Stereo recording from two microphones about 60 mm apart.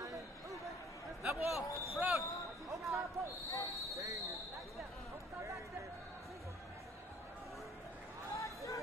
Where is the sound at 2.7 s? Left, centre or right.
Right.